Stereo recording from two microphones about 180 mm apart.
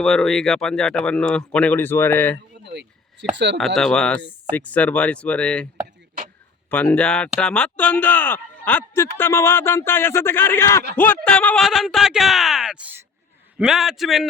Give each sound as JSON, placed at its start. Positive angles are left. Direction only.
{"t": 0.0, "sound": "speech", "side_deg": 0}
{"t": 2.7, "sound": "speech", "side_deg": -75}
{"t": 3.8, "sound": "speech", "side_deg": 5}
{"t": 6.7, "sound": "speech", "side_deg": 5}